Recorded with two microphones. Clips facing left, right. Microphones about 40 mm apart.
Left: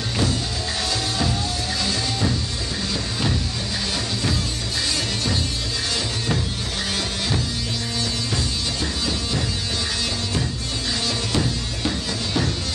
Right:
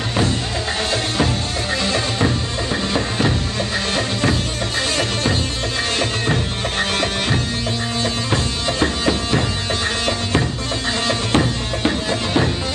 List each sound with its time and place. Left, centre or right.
1.9 s music: right
5.9 s music: right
8.0 s music: right
11.1 s music: right